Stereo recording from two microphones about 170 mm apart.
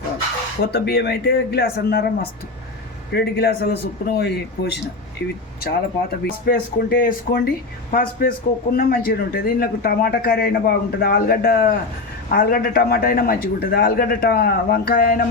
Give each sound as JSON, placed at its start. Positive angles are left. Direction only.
{"t": 0.6, "sound": "a man's voice", "side_deg": 70}
{"t": 6.1, "sound": "speech", "side_deg": 65}
{"t": 7.9, "sound": "speech", "side_deg": 55}